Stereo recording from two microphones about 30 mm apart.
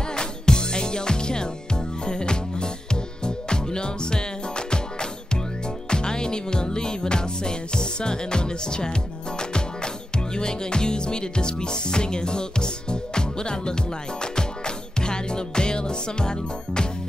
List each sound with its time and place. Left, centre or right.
0.1 s music: left
5.9 s music: left
10.1 s music: left
15.0 s music: left